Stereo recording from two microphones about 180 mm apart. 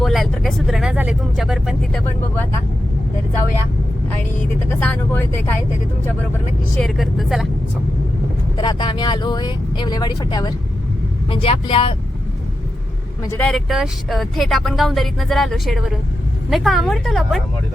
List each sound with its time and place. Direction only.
0.0 s speech: centre (ahead or behind)
4.8 s speech: 10° left (ahead or behind)
6.8 s speech: centre (ahead or behind)
8.5 s speech: 25° left (ahead or behind)
13.4 s speech: centre (ahead or behind)